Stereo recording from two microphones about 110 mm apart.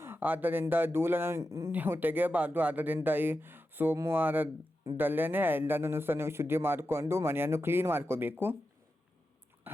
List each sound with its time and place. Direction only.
0.0 s a man's voice: 20° right (ahead or behind)
1.7 s a man's voice: 15° right (ahead or behind)
9.7 s dog: 20° right (ahead or behind)